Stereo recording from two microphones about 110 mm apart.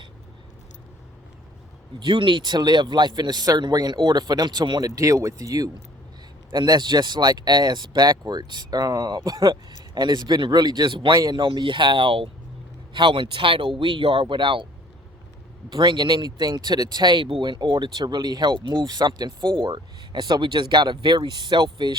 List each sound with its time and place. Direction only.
2.0 s speech: 45° right (ahead or behind)
4.9 s speech: 30° right (ahead or behind); by 14.7 s 50° right (ahead or behind)
15.7 s speech: 40° right (ahead or behind)